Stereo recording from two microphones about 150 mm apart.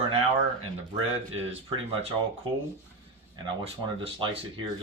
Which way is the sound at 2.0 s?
40° right (ahead or behind).